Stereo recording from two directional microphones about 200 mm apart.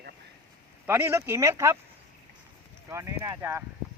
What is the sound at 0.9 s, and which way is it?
Speech, 10° right (ahead or behind).